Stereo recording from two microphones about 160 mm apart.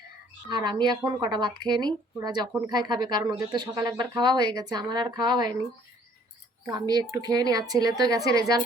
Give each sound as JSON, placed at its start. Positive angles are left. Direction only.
{"t": 0.4, "sound": "speech", "side_deg": -30}
{"t": 6.7, "sound": "speech", "side_deg": -25}